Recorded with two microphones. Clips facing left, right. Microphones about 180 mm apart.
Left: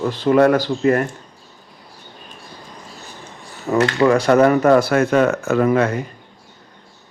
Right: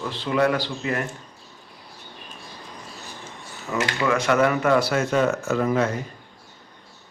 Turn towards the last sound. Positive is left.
turn(degrees=70)  # may be behind; listen again after turning